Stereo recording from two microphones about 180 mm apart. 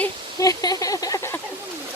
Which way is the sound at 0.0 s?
20° left (ahead or behind).